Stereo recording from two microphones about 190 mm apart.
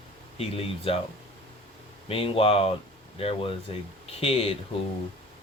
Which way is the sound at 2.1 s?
30° left (ahead or behind).